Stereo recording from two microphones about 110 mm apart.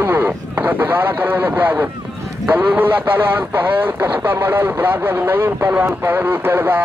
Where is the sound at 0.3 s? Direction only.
15° right (ahead or behind).